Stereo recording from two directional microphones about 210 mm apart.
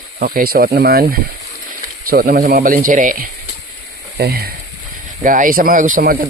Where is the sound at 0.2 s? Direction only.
45° right (ahead or behind).